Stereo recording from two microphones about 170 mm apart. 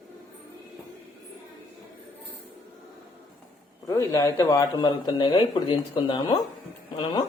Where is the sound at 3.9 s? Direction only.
20° left (ahead or behind).